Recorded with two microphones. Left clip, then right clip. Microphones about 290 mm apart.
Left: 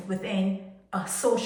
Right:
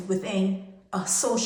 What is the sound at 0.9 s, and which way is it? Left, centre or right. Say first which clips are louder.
Speech: left 1 dB; centre.